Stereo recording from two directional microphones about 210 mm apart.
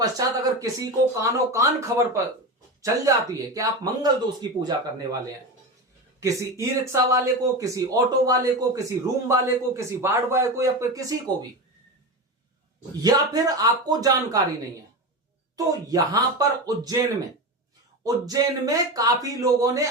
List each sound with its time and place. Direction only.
0.0 s a man's voice: 15° right (ahead or behind)
6.1 s a man's voice: 15° right (ahead or behind)
13.0 s a man's voice: 15° right (ahead or behind)
15.5 s a man's voice: 15° right (ahead or behind)
18.0 s a man's voice: 15° right (ahead or behind)